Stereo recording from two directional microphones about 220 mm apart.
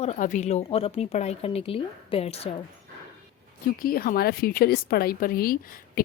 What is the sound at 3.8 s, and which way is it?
A woman's voice, 40° left (ahead or behind).